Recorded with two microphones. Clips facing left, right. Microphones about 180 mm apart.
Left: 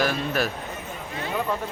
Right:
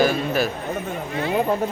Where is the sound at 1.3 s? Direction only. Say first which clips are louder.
Right 6 dB; 35° right (ahead or behind).